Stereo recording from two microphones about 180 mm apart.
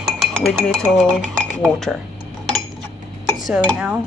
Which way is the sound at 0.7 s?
5° left (ahead or behind).